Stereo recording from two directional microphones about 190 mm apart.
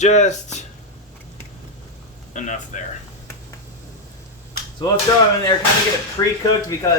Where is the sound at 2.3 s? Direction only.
40° left (ahead or behind).